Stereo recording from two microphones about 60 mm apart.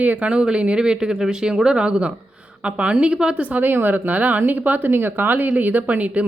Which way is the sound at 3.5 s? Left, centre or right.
Right.